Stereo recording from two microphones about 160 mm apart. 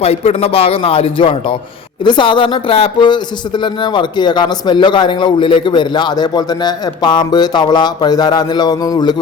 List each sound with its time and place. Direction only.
0.0 s a man's voice: 40° left (ahead or behind); by 9.1 s 25° left (ahead or behind)